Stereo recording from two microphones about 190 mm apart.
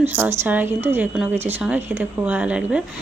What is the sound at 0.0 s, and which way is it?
A woman's voice, 10° right (ahead or behind).